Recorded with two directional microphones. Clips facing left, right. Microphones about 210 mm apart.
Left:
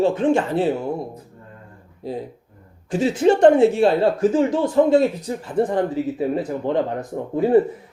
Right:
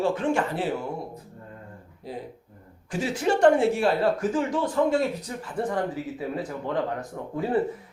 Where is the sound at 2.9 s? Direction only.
25° left (ahead or behind).